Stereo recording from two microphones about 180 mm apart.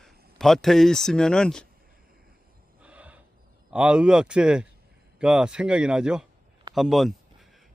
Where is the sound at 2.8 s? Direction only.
5° right (ahead or behind).